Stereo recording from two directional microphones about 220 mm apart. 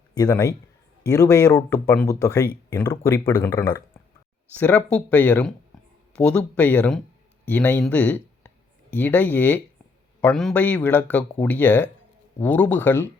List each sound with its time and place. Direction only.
0.1 s a man's voice: 15° left (ahead or behind)